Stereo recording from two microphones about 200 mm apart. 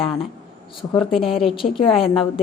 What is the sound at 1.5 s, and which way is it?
Speech, 25° left (ahead or behind).